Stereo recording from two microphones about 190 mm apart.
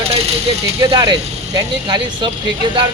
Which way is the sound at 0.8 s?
20° right (ahead or behind).